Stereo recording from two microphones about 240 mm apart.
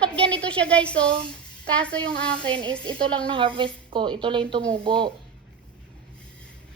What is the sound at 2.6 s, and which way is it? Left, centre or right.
Speech, centre.